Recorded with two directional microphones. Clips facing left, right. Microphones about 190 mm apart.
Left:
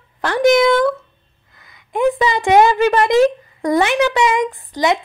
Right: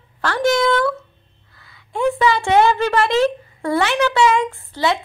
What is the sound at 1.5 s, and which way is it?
A woman's voice, 15° left (ahead or behind).